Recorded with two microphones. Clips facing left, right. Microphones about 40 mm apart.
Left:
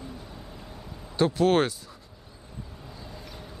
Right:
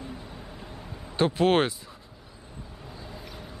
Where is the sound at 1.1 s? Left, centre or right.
Right.